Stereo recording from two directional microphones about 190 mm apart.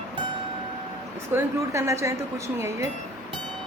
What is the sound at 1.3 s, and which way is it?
A woman's voice, 15° right (ahead or behind).